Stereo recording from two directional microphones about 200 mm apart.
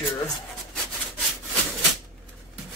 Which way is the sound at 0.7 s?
Centre (ahead or behind).